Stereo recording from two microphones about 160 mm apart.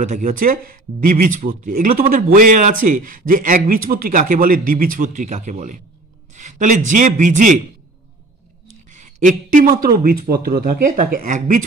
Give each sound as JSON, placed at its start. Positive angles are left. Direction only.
{"t": 0.0, "sound": "a man's voice", "side_deg": -50}
{"t": 8.9, "sound": "a man's voice", "side_deg": -50}